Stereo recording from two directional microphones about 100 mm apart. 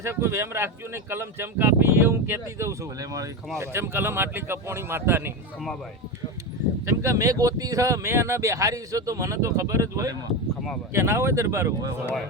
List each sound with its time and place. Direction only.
0.0 s speech: 25° right (ahead or behind)
3.6 s speech: 25° right (ahead or behind)
6.8 s speech: 30° right (ahead or behind)